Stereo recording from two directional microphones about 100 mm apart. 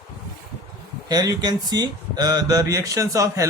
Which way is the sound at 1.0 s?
35° right (ahead or behind).